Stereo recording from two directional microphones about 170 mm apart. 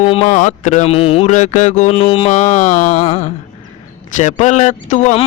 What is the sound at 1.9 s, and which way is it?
Music, 30° left (ahead or behind).